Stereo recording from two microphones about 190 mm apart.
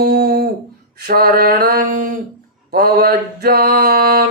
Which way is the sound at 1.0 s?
55° right (ahead or behind).